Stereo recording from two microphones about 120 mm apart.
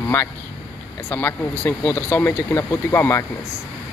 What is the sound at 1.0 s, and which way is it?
Speech, 15° left (ahead or behind).